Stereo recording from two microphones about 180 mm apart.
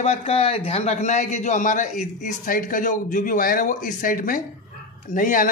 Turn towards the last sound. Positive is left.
turn(degrees=50)  # may be behind; listen again after turning